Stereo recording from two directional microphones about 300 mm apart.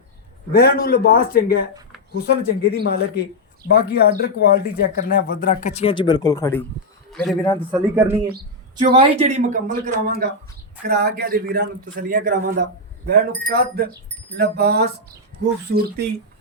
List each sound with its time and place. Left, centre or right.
0.5 s a man's voice: left; by 7.5 s centre
7.7 s speech: centre; by 16.0 s right